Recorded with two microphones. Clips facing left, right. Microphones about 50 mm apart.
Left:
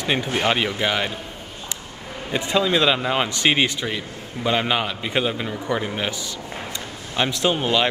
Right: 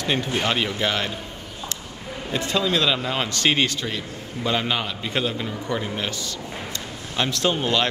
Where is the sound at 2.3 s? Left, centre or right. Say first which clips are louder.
Left 3 dB; centre.